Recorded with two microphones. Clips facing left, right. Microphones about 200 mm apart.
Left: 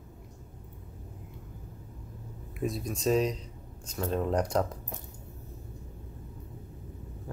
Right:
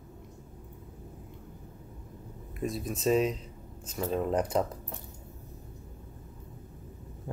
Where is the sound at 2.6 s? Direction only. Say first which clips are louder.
Even; centre (ahead or behind).